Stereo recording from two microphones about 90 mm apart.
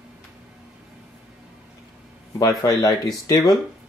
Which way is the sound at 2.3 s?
40° left (ahead or behind).